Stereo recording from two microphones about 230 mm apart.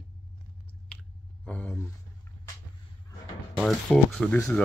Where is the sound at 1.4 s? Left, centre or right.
Centre.